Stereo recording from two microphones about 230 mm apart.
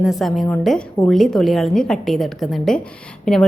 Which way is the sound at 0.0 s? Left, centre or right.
Centre.